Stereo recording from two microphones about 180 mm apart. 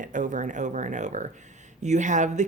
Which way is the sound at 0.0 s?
45° right (ahead or behind).